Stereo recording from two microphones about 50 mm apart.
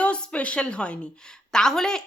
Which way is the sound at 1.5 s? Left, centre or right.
Centre.